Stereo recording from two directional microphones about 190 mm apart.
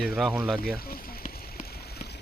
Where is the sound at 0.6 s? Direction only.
50° left (ahead or behind).